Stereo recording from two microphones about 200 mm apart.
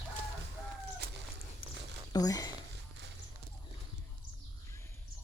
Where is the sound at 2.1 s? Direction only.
20° left (ahead or behind).